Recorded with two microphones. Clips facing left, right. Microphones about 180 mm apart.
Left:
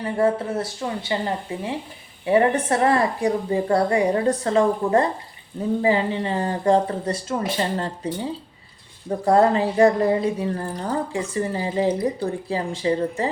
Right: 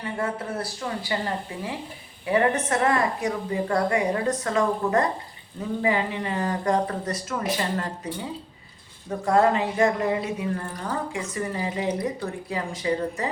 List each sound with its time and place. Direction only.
0.0 s speech: 30° left (ahead or behind)